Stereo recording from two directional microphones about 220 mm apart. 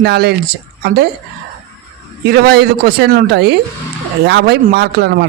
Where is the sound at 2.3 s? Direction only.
45° right (ahead or behind).